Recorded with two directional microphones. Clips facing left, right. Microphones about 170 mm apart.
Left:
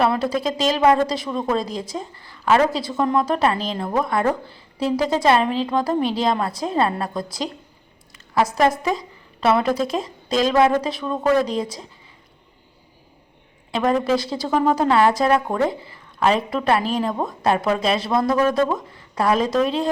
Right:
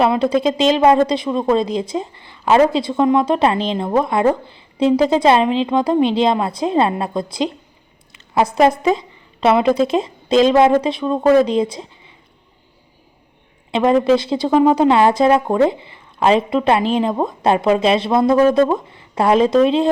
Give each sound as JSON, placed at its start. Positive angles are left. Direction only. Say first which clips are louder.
{"t": 0.0, "sound": "speech", "louder": "right 5 dB", "side_deg": -20}
{"t": 8.8, "sound": "speech", "louder": "right 6 dB", "side_deg": -25}
{"t": 13.7, "sound": "speech", "louder": "right 6 dB", "side_deg": -25}